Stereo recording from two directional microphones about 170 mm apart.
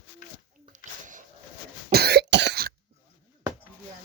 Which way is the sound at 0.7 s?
50° right (ahead or behind).